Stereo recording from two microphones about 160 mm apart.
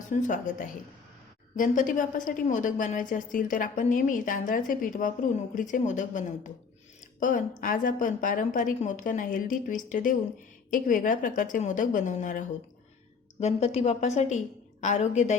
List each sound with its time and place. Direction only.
0.1 s a woman's voice: 55° left (ahead or behind)